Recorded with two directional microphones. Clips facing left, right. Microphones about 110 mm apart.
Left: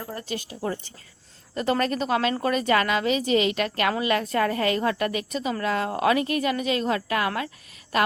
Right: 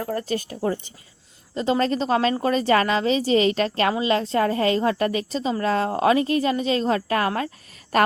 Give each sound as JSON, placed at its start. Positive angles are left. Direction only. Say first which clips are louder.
{"t": 0.1, "sound": "speech", "louder": "right 7 dB", "side_deg": -45}
{"t": 0.6, "sound": "a woman's voice", "louder": "right 5 dB", "side_deg": -20}